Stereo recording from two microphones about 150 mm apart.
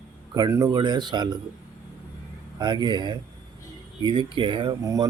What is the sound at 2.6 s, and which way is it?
Speech, 30° right (ahead or behind).